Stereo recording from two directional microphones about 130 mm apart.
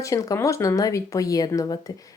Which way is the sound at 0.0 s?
25° left (ahead or behind).